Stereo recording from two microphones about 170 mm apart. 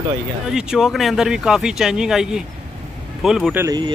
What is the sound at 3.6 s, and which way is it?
Speech, 20° right (ahead or behind).